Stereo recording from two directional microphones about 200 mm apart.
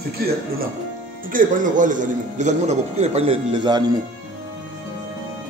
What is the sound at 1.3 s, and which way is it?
A man's voice, 40° right (ahead or behind).